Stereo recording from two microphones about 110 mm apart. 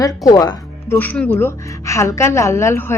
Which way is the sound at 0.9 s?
15° left (ahead or behind).